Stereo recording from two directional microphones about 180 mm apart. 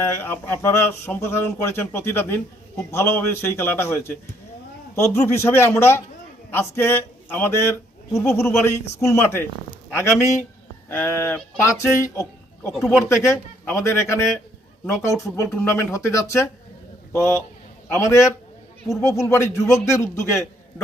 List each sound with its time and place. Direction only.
0.0 s a man's voice: 15° left (ahead or behind)
12.1 s a sound: 15° left (ahead or behind)
12.7 s speech: centre (ahead or behind)
13.2 s speech: 15° left (ahead or behind)
15.4 s speech: 10° left (ahead or behind)